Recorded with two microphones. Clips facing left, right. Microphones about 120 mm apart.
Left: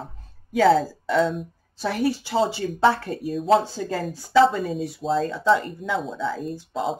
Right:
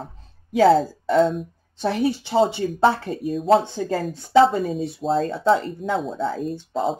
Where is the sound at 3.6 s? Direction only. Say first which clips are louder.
Right 2 dB; 25° right (ahead or behind).